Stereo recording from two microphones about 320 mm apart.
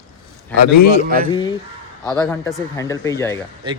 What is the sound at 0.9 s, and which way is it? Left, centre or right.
Speech, right.